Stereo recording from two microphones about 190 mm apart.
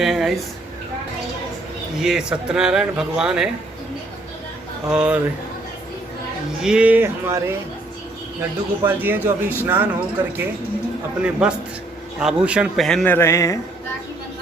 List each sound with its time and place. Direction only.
0.0 s a sound: centre (ahead or behind)
2.0 s speech: 5° right (ahead or behind)
4.9 s speech: 5° right (ahead or behind)
6.6 s a man's voice: 5° right (ahead or behind)
11.2 s speech: 5° right (ahead or behind)
13.1 s a man's voice: 15° left (ahead or behind)